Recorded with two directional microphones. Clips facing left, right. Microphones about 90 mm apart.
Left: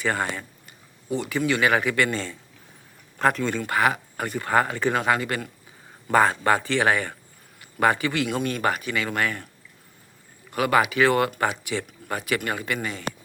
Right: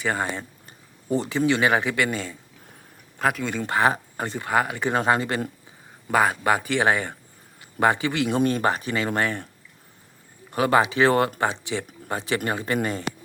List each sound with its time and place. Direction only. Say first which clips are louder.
0.0 s speech: even; 15° right (ahead or behind)
1.1 s speech: right 2 dB; 30° right (ahead or behind); by 3.6 s 5° right (ahead or behind)
3.6 s speech: right 4 dB; 30° right (ahead or behind)
4.4 s speech: left 1 dB; 10° right (ahead or behind)
4.9 s speech: right 5 dB; 30° right (ahead or behind)
6.1 s a man's voice: left 1 dB; 5° right (ahead or behind)
8.4 s speech: right 3 dB; 30° right (ahead or behind)
10.5 s speech: right 1 dB; 25° right (ahead or behind)